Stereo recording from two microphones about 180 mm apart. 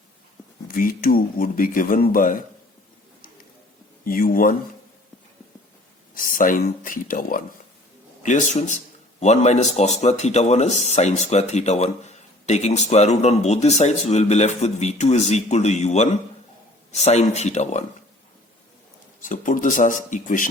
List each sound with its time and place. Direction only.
0.7 s speech: 50° left (ahead or behind)
4.0 s speech: 50° left (ahead or behind)
6.1 s a man's voice: 50° left (ahead or behind)
19.2 s speech: 45° left (ahead or behind)